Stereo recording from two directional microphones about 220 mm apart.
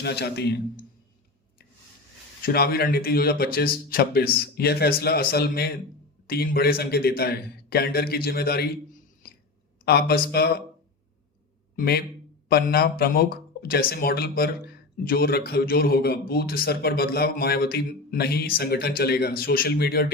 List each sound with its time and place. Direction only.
0.0 s a man's voice: 50° left (ahead or behind)
2.4 s a man's voice: 45° left (ahead or behind)
9.2 s a sound: 40° left (ahead or behind)
9.8 s a man's voice: 45° left (ahead or behind)
11.8 s a man's voice: 45° left (ahead or behind)